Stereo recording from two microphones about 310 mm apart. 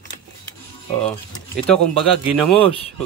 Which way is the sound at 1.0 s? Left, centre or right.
Centre.